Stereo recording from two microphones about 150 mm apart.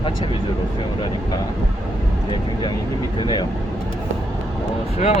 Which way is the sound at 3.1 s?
30° left (ahead or behind).